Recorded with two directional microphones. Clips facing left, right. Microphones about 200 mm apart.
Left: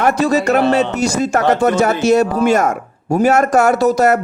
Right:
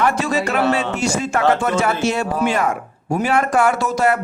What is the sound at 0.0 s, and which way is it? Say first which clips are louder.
Speech: left 5 dB; 40° left (ahead or behind).